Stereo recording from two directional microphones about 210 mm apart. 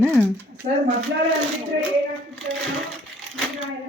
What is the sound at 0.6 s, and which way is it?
Speech, 35° right (ahead or behind).